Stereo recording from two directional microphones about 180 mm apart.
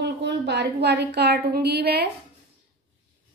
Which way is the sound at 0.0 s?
70° right (ahead or behind).